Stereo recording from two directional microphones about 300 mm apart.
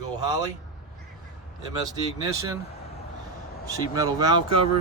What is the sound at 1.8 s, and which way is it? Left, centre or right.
Speech, centre.